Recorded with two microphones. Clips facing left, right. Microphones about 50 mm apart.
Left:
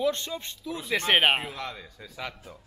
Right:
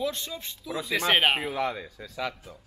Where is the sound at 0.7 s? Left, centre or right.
Centre.